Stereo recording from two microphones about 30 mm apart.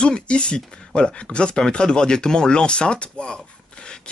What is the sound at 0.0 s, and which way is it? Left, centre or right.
Speech, left.